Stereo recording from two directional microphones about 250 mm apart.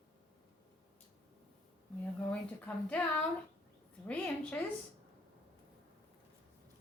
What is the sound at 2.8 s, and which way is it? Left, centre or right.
A woman's voice, centre.